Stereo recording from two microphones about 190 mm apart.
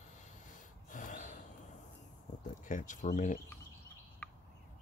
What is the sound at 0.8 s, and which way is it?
Snort, 45° left (ahead or behind).